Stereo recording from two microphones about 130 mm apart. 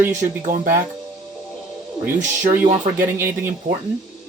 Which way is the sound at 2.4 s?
80° right.